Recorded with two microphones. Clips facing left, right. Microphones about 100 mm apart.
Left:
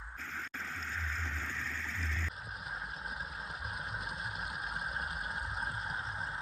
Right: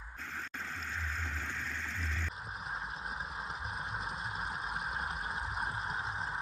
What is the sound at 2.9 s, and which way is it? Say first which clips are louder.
Vehicle: right 2 dB; 30° right (ahead or behind).